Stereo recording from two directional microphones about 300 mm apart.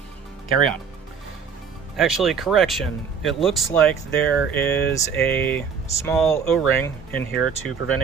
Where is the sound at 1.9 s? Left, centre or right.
Centre.